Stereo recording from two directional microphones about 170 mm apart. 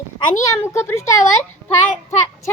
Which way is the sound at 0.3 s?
15° left (ahead or behind).